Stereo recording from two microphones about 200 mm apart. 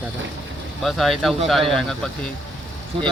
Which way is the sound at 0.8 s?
Centre (ahead or behind).